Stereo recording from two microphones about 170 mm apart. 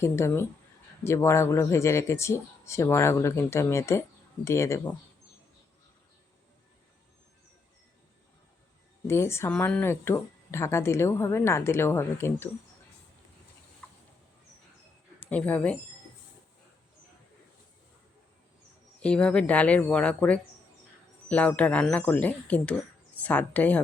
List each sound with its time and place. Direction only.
0.0 s speech: 15° left (ahead or behind)
9.0 s speech: 15° left (ahead or behind)
15.3 s speech: 10° left (ahead or behind)
18.9 s speech: 5° left (ahead or behind)